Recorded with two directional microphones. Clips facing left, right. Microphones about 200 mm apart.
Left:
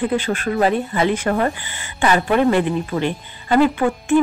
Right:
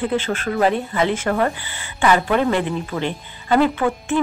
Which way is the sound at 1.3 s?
30° left (ahead or behind).